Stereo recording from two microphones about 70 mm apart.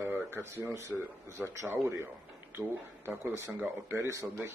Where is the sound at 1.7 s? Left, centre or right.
Right.